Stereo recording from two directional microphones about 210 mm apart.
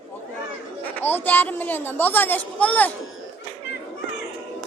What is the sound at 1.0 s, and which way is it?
Speech, 10° left (ahead or behind).